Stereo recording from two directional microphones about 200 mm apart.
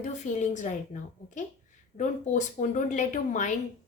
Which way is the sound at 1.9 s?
35° left (ahead or behind).